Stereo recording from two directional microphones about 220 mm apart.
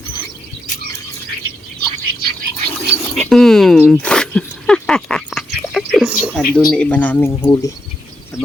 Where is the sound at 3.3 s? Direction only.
Centre (ahead or behind).